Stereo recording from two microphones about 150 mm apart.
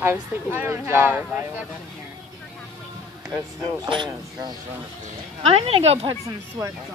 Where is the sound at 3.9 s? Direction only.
30° right (ahead or behind).